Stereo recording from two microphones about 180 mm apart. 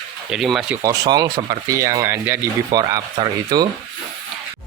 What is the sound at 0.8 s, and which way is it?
Speech, 20° right (ahead or behind).